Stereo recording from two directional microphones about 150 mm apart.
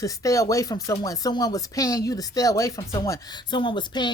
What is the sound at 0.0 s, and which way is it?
Speech, 20° left (ahead or behind).